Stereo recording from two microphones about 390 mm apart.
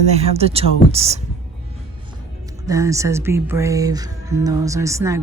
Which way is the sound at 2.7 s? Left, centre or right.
Centre.